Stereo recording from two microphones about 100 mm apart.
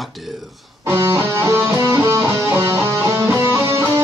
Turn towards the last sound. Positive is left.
turn(degrees=-30)  # may be behind; listen again after turning